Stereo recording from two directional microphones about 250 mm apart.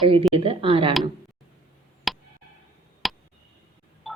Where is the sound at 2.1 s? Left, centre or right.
Centre.